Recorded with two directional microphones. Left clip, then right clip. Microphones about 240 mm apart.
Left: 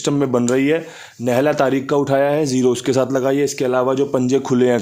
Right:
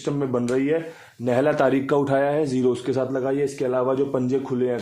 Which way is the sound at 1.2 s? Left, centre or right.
Left.